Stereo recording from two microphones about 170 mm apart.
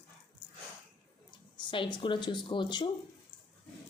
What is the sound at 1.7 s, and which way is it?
Speech, 30° left (ahead or behind).